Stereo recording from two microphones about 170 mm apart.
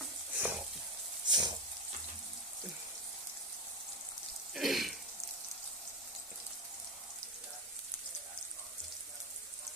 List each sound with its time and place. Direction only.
0.3 s sizzle: 5° right (ahead or behind)
1.3 s frying: 25° right (ahead or behind)
4.5 s throat clearing: centre (ahead or behind)